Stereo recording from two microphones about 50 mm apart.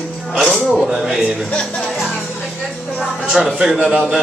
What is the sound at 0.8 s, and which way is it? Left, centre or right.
Speech, centre.